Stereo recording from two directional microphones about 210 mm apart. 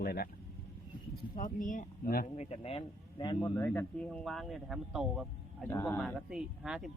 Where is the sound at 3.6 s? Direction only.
5° left (ahead or behind).